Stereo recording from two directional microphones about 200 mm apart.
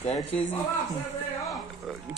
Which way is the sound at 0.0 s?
30° left (ahead or behind).